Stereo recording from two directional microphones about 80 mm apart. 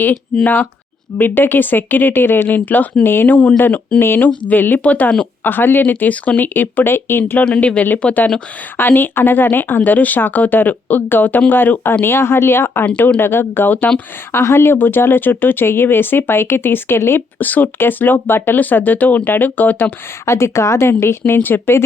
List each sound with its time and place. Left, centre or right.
0.4 s speech: left
7.4 s speech: centre; by 12.8 s left
12.8 s speech: centre
13.1 s speech: left
20.2 s speech: left